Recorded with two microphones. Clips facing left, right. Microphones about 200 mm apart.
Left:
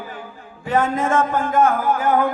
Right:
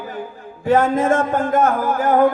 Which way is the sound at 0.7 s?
50° right (ahead or behind).